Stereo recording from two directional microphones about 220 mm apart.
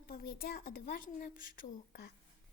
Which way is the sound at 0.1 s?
45° left (ahead or behind).